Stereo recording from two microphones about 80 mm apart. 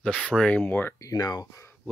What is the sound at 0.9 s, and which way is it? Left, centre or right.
Speech, left.